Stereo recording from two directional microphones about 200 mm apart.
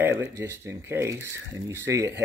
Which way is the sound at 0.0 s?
10° right (ahead or behind).